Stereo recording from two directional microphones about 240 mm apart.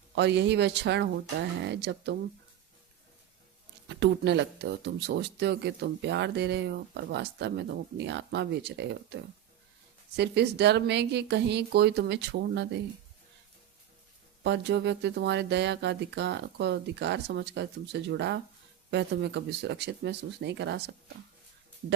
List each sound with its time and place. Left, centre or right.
0.2 s speech: right
3.8 s speech: right
14.4 s speech: right